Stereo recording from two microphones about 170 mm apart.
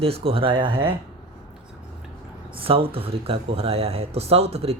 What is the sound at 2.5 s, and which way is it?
Speech, 35° right (ahead or behind).